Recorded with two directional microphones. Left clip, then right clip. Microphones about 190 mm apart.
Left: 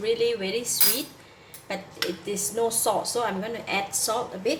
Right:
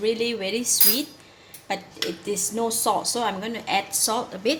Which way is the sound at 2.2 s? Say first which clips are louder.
Right 1 dB; 45° right (ahead or behind).